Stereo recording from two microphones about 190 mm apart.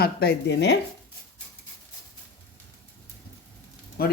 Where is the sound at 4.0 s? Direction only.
55° left (ahead or behind).